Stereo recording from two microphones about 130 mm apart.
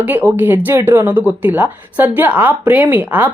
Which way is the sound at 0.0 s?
15° right (ahead or behind).